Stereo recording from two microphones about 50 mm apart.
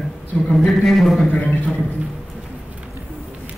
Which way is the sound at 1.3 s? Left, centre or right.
Left.